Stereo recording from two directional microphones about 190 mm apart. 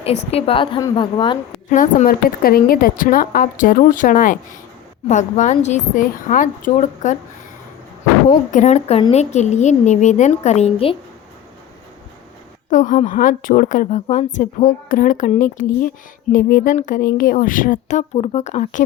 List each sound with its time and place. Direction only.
0.3 s a woman's voice: 30° left (ahead or behind)
1.7 s a woman's voice: 40° left (ahead or behind)
8.5 s a woman's voice: 35° left (ahead or behind)
12.7 s a woman's voice: 40° left (ahead or behind)